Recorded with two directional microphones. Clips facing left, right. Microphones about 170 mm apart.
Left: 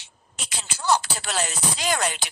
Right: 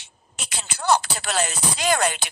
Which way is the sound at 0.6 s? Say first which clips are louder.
Right 2 dB; 60° right (ahead or behind).